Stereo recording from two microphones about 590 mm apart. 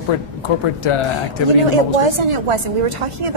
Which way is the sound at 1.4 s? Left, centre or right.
Right.